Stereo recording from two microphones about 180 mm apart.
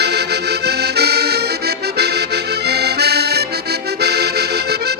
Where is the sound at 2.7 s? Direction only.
65° right (ahead or behind).